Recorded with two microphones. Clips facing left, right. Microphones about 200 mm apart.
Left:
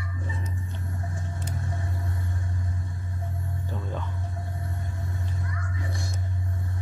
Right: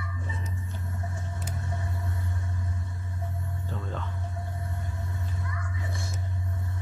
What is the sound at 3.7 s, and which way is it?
Music, 10° left (ahead or behind).